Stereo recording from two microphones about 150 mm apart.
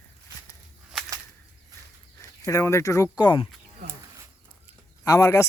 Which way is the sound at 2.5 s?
20° left (ahead or behind).